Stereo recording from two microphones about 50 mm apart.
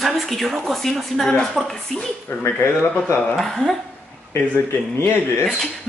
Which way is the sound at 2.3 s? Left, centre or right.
Left.